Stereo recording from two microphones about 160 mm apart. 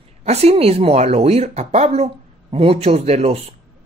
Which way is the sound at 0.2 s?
40° right (ahead or behind).